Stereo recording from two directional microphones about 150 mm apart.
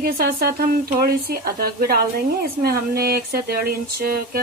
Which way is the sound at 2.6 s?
90° right.